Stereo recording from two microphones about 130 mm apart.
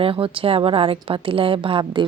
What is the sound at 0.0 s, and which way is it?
A woman's voice, 45° right (ahead or behind).